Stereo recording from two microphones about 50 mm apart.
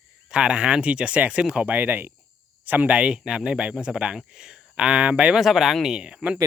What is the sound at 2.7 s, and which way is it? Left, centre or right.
Speech, right.